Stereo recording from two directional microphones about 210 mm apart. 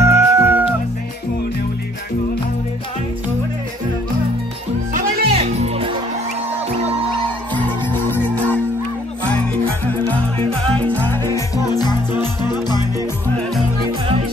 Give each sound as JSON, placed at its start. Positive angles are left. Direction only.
{"t": 0.0, "sound": "music", "side_deg": -10}
{"t": 5.2, "sound": "music", "side_deg": -30}
{"t": 7.8, "sound": "music", "side_deg": 10}
{"t": 10.8, "sound": "music", "side_deg": 5}
{"t": 11.7, "sound": "music", "side_deg": 20}